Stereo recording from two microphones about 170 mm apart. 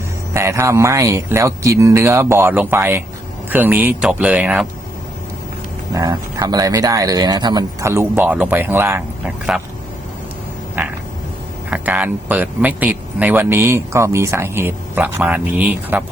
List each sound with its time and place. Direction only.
0.3 s speech: 15° right (ahead or behind)
5.9 s speech: 20° right (ahead or behind)
10.8 s frog: 10° right (ahead or behind)
11.7 s speech: 10° right (ahead or behind)